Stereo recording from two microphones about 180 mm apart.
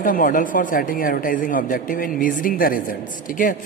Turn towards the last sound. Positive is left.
turn(degrees=50)  # may be behind; listen again after turning